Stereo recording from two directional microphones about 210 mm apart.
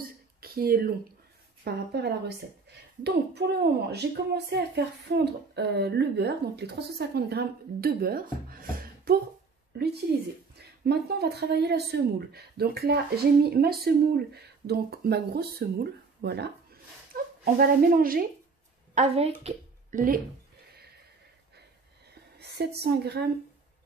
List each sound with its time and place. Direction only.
0.4 s a woman's voice: 45° right (ahead or behind)
10.6 s a woman's voice: 50° right (ahead or behind)
18.9 s a woman's voice: 30° right (ahead or behind)
22.4 s a sound: 50° right (ahead or behind)
22.8 s a woman's voice: 50° right (ahead or behind)